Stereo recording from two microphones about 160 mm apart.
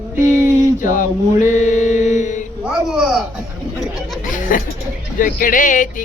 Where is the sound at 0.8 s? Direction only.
55° left (ahead or behind).